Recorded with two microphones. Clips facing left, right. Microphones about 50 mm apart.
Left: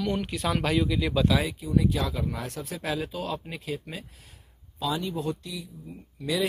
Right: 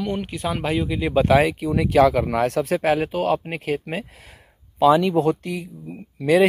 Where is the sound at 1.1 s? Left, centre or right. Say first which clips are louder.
Right 13 dB; right.